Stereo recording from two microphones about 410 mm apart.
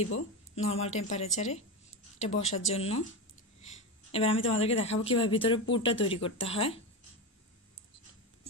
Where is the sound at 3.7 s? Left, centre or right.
Centre.